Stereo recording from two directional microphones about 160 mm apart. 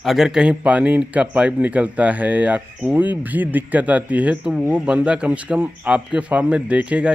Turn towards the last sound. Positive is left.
turn(degrees=-5)  # may be behind; listen again after turning